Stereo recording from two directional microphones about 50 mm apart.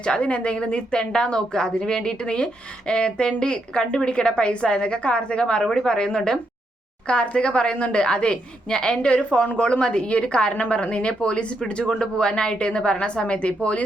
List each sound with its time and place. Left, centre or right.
0.0 s a woman's voice: left